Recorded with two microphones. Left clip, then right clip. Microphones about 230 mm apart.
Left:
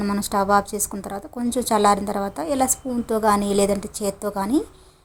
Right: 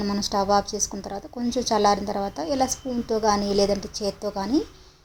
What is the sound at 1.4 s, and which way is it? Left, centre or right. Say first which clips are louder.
Speech: left 1 dB; left.